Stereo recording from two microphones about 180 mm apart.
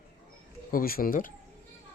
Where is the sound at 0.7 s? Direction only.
55° left (ahead or behind).